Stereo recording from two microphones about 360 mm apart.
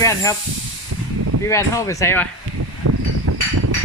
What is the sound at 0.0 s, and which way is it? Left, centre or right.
Speech, centre.